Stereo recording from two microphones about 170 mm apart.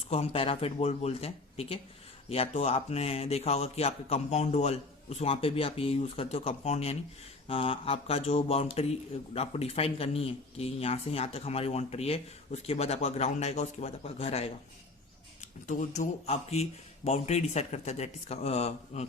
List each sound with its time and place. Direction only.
0.1 s speech: 35° left (ahead or behind)
15.6 s speech: 45° left (ahead or behind)